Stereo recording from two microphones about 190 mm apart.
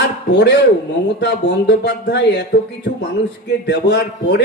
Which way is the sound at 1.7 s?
60° left (ahead or behind).